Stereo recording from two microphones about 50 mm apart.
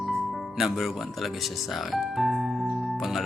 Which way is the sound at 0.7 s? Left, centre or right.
Centre.